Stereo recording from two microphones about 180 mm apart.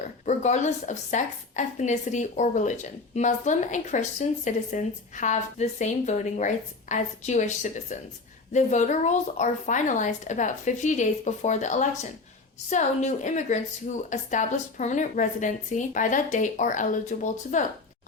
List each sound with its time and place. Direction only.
0.0 s a woman's voice: 40° left (ahead or behind)